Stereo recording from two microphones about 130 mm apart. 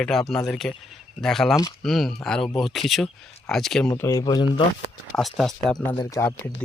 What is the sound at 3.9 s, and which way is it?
Speech, 20° left (ahead or behind).